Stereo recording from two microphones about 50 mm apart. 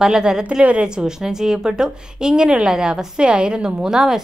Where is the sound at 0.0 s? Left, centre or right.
Centre.